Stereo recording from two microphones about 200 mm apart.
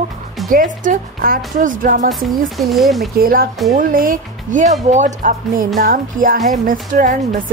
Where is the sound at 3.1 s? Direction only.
45° right (ahead or behind).